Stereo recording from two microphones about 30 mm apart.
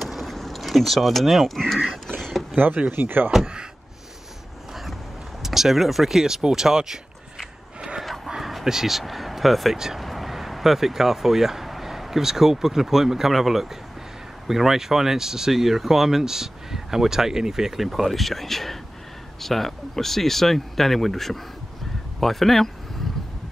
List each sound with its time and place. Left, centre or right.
0.0 s vehicle: centre
1.6 s speech: centre
2.1 s a sound: centre
3.0 s speech: right
5.4 s speech: centre
6.1 s speech: centre
8.6 s speech: centre
15.5 s speech: centre
17.7 s speech: centre